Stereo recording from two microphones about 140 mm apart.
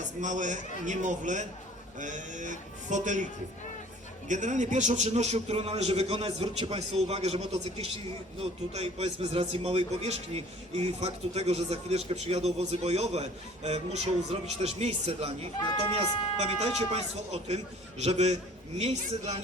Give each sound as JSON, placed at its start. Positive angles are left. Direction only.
{"t": 0.2, "sound": "speech", "side_deg": -60}
{"t": 4.3, "sound": "a man's voice", "side_deg": -60}